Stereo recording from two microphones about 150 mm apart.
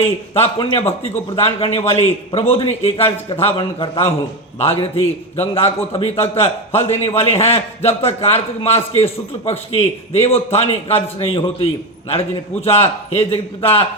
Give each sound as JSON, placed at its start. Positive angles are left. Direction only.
{"t": 0.3, "sound": "a man's voice", "side_deg": 40}